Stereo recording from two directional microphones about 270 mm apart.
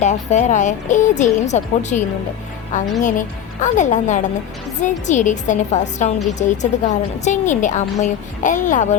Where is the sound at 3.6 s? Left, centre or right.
Left.